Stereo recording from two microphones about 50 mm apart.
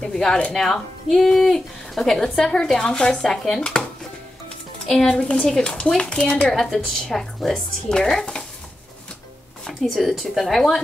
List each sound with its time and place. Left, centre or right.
0.0 s speech: centre
4.8 s speech: centre
6.5 s speech: centre
9.7 s speech: centre